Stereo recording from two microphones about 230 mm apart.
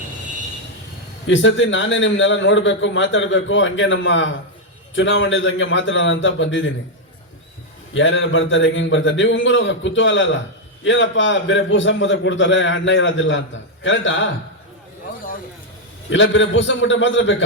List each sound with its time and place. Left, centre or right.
1.3 s a man's voice: left
7.9 s a man's voice: left
16.0 s a man's voice: left